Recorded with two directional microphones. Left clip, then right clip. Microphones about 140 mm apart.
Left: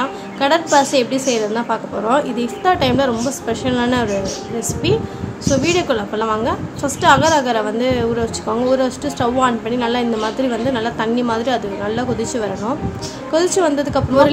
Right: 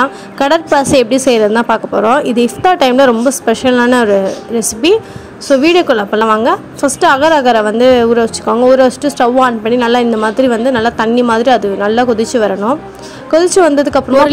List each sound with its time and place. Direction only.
0.0 s a woman's voice: 60° right (ahead or behind)